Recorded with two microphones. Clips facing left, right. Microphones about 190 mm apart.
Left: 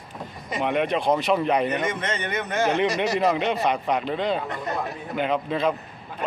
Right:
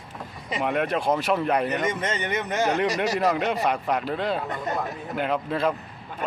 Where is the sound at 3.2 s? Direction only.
5° right (ahead or behind).